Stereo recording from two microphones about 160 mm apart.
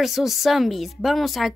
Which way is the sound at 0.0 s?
Centre (ahead or behind).